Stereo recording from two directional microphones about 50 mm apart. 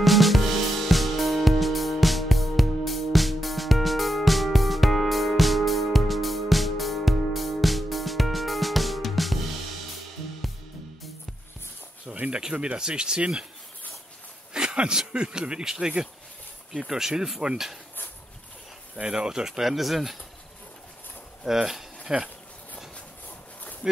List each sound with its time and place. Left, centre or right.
0.0 s music: centre
12.3 s speech: centre
14.5 s speech: centre
16.9 s speech: centre
18.9 s speech: centre
21.5 s speech: centre
23.8 s speech: centre